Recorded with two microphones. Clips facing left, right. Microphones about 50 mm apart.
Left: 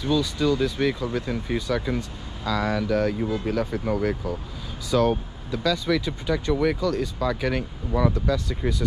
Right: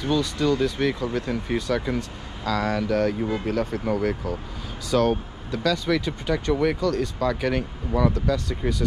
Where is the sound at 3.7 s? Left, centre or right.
Right.